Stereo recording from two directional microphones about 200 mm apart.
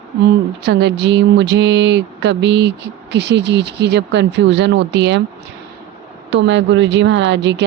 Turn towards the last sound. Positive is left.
turn(degrees=-65)  # may be behind; listen again after turning